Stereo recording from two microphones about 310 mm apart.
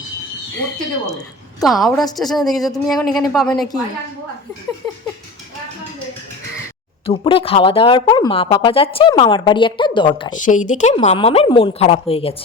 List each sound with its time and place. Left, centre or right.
1.6 s speech: centre
7.0 s a woman's voice: centre